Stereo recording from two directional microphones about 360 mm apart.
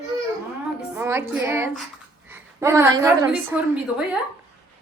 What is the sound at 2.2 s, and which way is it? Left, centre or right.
A woman's voice, centre.